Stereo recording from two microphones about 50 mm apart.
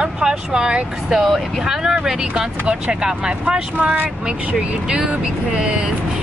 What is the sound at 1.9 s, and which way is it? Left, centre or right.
Speech, right.